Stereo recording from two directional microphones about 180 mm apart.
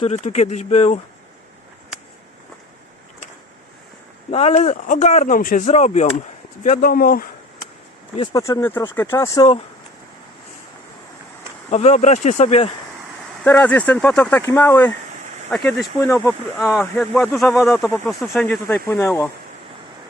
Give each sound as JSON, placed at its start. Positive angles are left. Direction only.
{"t": 0.0, "sound": "speech", "side_deg": 40}
{"t": 4.3, "sound": "speech", "side_deg": 35}
{"t": 8.1, "sound": "speech", "side_deg": 25}
{"t": 11.7, "sound": "speech", "side_deg": 40}
{"t": 13.4, "sound": "speech", "side_deg": 10}
{"t": 16.8, "sound": "speech", "side_deg": 10}